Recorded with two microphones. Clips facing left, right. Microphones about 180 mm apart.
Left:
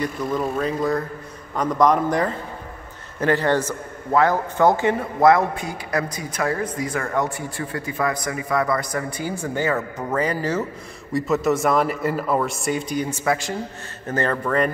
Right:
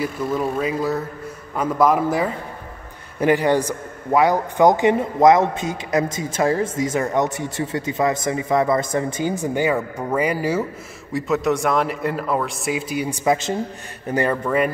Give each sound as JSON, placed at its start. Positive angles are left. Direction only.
{"t": 0.0, "sound": "a man's voice", "side_deg": -5}
{"t": 11.1, "sound": "speech", "side_deg": 0}